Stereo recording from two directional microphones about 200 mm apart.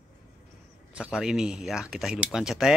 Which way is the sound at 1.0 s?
5° right (ahead or behind).